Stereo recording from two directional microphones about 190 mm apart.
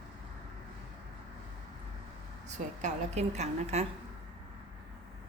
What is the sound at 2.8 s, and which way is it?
A woman's voice, 35° right (ahead or behind).